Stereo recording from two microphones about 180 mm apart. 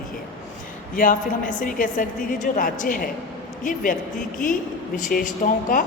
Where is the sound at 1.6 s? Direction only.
50° left (ahead or behind).